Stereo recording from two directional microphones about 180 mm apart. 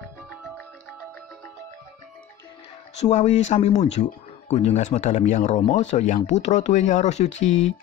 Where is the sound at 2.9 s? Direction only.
40° left (ahead or behind).